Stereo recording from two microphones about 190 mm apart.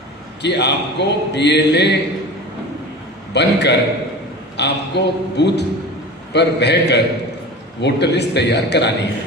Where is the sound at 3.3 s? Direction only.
65° left (ahead or behind).